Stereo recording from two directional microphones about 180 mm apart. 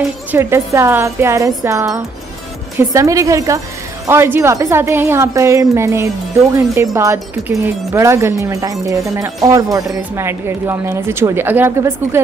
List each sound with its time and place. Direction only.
0.3 s speech: 15° right (ahead or behind)